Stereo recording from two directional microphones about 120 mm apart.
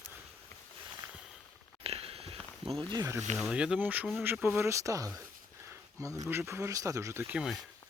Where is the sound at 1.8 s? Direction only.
55° right (ahead or behind).